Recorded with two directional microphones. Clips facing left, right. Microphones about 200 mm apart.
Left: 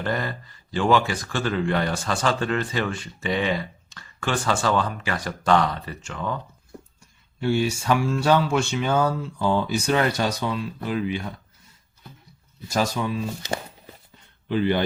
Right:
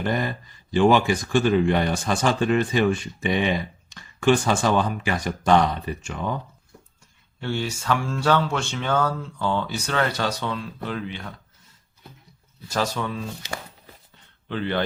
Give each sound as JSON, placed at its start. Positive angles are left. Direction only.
{"t": 0.0, "sound": "speech", "side_deg": -15}
{"t": 7.4, "sound": "speech", "side_deg": 10}
{"t": 12.7, "sound": "speech", "side_deg": 10}
{"t": 14.5, "sound": "speech", "side_deg": 10}